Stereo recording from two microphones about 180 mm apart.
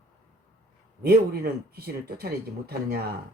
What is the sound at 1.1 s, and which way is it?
Speech, 60° right (ahead or behind).